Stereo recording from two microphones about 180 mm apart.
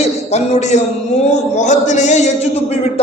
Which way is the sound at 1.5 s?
40° left (ahead or behind).